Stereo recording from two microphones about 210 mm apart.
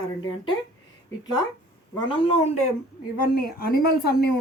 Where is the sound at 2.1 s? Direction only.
25° left (ahead or behind).